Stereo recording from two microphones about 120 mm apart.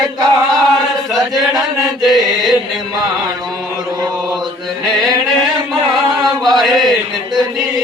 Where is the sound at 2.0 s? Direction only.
Centre (ahead or behind).